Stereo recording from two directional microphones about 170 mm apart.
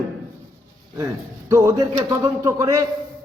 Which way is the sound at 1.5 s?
15° right (ahead or behind).